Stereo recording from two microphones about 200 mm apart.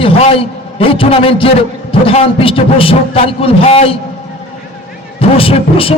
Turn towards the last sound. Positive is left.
turn(degrees=30)  # may be behind; listen again after turning